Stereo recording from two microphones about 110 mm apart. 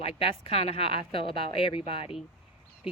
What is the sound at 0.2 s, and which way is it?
A woman's voice, 60° left (ahead or behind).